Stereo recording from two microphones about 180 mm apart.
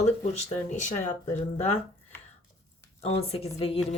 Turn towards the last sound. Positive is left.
turn(degrees=30)  # may be behind; listen again after turning